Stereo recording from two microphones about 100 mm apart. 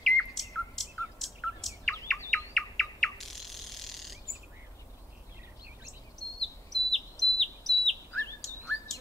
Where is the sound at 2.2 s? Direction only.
5° left (ahead or behind).